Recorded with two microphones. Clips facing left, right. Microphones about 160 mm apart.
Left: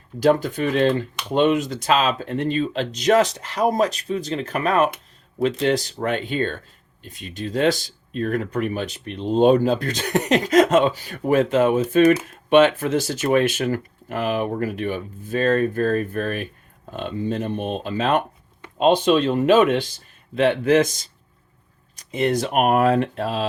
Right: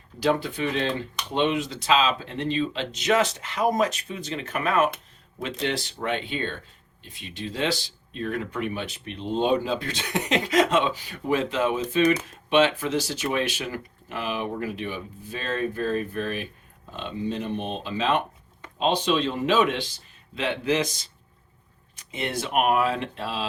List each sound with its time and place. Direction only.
0.2 s speech: 45° left (ahead or behind)
21.9 s speech: 40° left (ahead or behind)